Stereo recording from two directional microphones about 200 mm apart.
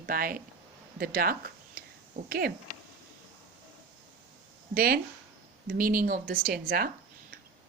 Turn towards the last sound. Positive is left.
turn(degrees=-50)  # may be behind; listen again after turning